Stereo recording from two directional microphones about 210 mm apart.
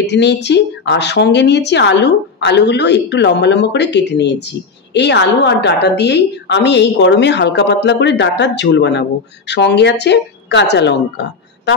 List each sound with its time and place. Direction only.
0.0 s speech: 55° left (ahead or behind)